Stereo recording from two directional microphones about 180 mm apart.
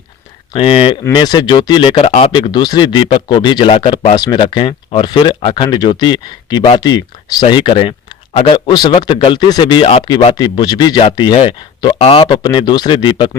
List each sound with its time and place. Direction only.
0.5 s speech: 25° left (ahead or behind)
10.3 s speech: 20° left (ahead or behind)